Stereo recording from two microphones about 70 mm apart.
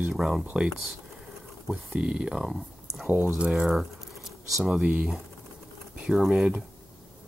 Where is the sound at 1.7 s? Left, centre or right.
Centre.